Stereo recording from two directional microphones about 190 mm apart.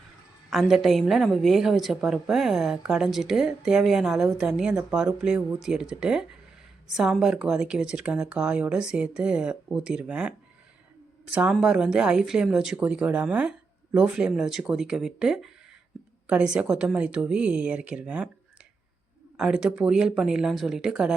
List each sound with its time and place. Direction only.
0.5 s a woman's voice: centre (ahead or behind)
19.4 s a woman's voice: 5° right (ahead or behind)